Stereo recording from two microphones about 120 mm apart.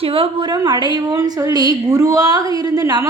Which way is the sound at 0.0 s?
50° right (ahead or behind).